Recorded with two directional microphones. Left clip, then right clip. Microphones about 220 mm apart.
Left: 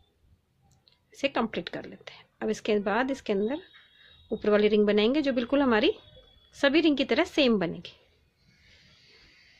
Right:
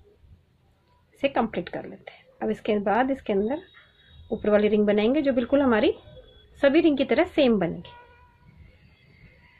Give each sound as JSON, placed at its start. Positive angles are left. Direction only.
{"t": 1.2, "sound": "a woman's voice", "side_deg": 45}